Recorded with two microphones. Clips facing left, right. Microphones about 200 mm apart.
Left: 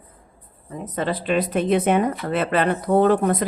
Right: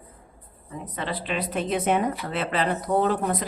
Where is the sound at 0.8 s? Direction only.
45° left (ahead or behind).